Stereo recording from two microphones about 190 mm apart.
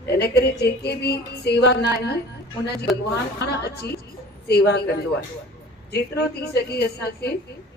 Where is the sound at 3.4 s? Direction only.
60° left (ahead or behind).